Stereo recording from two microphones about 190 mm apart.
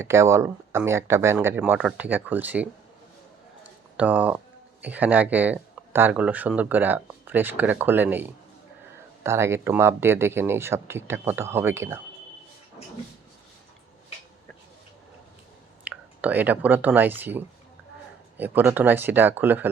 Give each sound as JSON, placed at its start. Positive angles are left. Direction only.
{"t": 0.0, "sound": "speech", "side_deg": -15}
{"t": 3.6, "sound": "a sound", "side_deg": -10}
{"t": 4.8, "sound": "speech", "side_deg": -10}
{"t": 15.8, "sound": "speech", "side_deg": -10}